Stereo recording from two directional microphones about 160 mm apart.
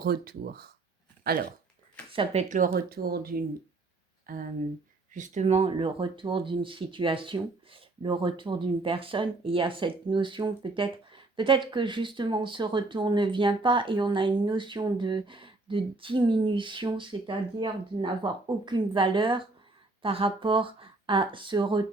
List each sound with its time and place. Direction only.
0.0 s speech: 70° right (ahead or behind)
2.1 s speech: 45° right (ahead or behind)
2.6 s speech: 70° right (ahead or behind)
5.1 s speech: 50° right (ahead or behind); by 21.9 s 30° right (ahead or behind)